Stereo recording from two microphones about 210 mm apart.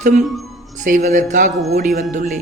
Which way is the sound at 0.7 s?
35° right (ahead or behind).